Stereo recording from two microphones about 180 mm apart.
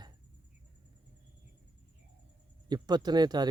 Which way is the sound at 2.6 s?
25° right (ahead or behind).